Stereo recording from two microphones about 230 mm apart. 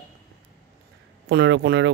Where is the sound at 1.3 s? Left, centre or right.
Right.